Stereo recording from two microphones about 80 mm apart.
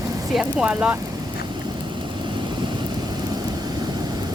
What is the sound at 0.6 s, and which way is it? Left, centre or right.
Speech, centre.